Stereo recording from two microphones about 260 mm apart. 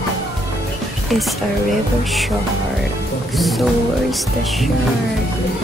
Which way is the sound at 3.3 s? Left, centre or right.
Centre.